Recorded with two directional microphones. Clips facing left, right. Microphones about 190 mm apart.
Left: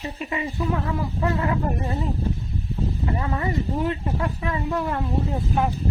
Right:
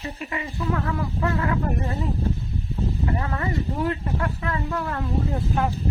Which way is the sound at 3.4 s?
20° left (ahead or behind).